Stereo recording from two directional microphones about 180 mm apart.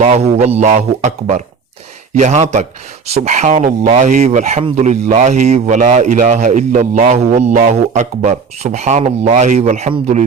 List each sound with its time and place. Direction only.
0.0 s speech: 35° right (ahead or behind)